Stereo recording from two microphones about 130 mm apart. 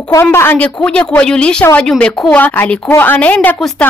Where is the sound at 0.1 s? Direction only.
20° left (ahead or behind).